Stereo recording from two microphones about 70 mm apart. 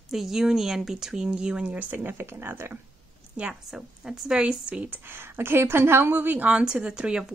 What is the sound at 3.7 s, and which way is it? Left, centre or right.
Speech, centre.